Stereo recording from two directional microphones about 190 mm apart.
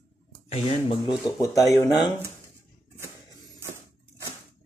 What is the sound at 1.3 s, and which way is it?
Speech, 15° left (ahead or behind).